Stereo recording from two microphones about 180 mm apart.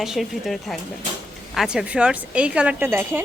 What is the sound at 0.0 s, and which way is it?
A woman's voice, centre (ahead or behind).